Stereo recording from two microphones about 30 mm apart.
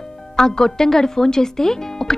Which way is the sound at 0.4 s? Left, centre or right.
Centre.